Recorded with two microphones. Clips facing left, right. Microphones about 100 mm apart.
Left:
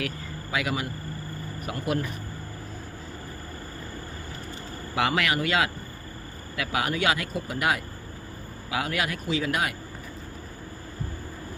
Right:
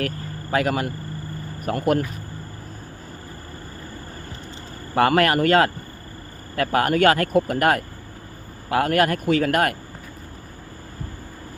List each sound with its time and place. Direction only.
0.5 s speech: 45° right (ahead or behind)
4.9 s speech: 45° right (ahead or behind)